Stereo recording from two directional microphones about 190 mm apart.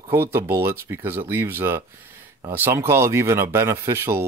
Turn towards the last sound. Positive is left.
turn(degrees=-10)  # may be behind; listen again after turning